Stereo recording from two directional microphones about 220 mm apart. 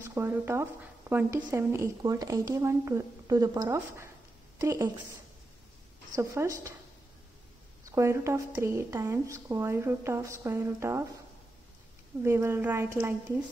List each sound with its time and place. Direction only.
0.0 s a woman's voice: 10° right (ahead or behind)
6.1 s a woman's voice: 15° right (ahead or behind)
7.8 s a woman's voice: 15° right (ahead or behind)
12.2 s a woman's voice: 10° right (ahead or behind)